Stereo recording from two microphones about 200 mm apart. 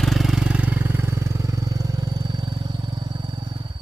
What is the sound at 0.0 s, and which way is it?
Vehicle, centre (ahead or behind).